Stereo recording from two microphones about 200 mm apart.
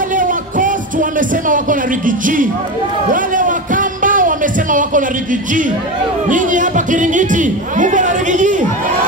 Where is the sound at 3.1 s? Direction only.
40° right (ahead or behind).